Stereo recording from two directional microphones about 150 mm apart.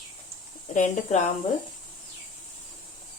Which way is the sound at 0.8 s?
50° left (ahead or behind).